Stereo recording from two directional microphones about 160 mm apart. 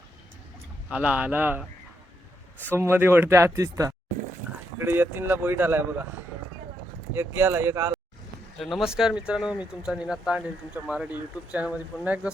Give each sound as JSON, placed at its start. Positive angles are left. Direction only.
{"t": 0.9, "sound": "a man's voice", "side_deg": -10}
{"t": 2.7, "sound": "a man's voice", "side_deg": -15}
{"t": 7.1, "sound": "a man's voice", "side_deg": -15}
{"t": 8.5, "sound": "speech", "side_deg": 0}